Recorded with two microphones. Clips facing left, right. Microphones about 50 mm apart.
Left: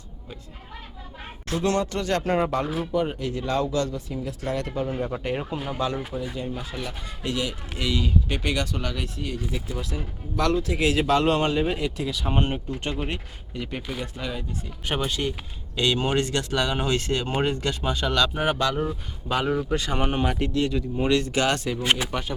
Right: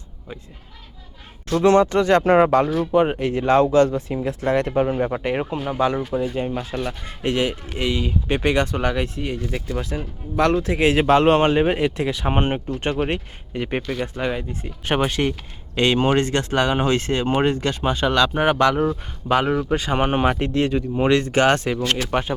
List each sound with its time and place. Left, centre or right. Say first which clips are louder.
1.6 s speech: right 10 dB; right
2.4 s speech: right 9 dB; right
2.9 s speech: right 8 dB; right
6.3 s speech: right 7 dB; right
7.8 s speech: right 2 dB; right
21.8 s speech: right 1 dB; centre
22.1 s speech: right 7 dB; right